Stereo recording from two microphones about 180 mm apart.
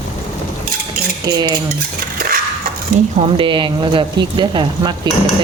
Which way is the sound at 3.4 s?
25° right (ahead or behind).